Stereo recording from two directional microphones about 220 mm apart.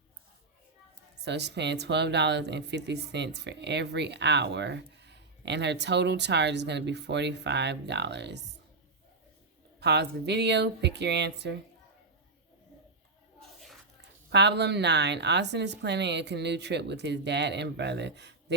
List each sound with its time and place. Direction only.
1.2 s speech: 50° right (ahead or behind)
9.8 s speech: 50° right (ahead or behind)
14.3 s speech: 50° right (ahead or behind)